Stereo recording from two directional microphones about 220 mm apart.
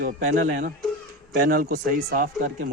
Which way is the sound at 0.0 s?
35° right (ahead or behind).